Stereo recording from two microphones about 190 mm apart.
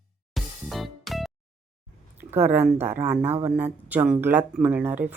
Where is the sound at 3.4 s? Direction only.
10° right (ahead or behind).